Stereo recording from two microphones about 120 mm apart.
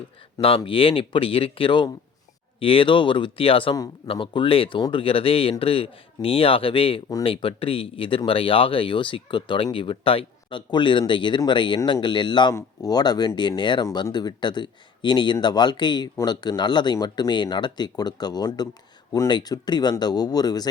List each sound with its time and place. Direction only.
0.4 s speech: 50° left (ahead or behind); by 20.7 s 35° left (ahead or behind)